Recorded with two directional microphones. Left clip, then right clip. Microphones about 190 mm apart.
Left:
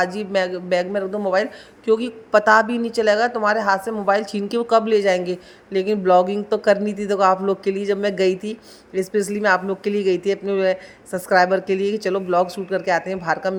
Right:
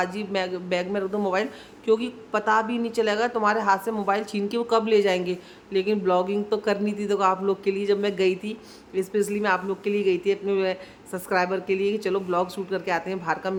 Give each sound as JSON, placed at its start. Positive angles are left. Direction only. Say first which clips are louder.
{"t": 0.0, "sound": "a woman's voice", "louder": "left 6 dB", "side_deg": 20}